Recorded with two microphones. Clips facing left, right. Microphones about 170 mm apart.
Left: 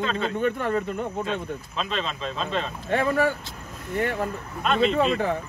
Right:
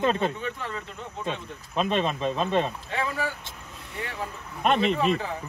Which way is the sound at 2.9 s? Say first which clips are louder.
Left 7 dB; 60° left (ahead or behind).